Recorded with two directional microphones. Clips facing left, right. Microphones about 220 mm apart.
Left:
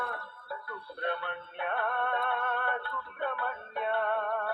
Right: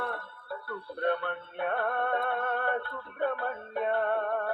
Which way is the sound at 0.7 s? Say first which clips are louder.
Right 6 dB; 45° right (ahead or behind).